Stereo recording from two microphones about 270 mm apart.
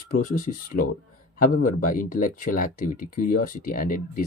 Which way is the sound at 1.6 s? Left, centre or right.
Left.